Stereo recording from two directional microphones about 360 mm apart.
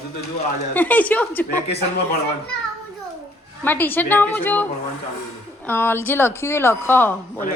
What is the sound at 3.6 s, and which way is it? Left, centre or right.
Speech, centre.